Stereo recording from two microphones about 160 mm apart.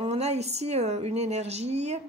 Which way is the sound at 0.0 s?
40° right (ahead or behind).